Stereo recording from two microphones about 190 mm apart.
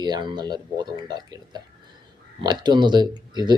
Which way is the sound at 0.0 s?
20° right (ahead or behind).